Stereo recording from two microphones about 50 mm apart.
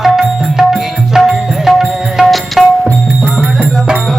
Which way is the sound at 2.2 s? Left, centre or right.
Centre.